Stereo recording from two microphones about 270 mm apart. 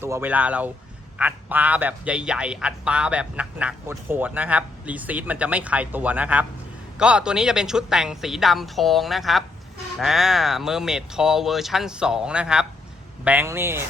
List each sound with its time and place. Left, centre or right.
0.0 s speech: centre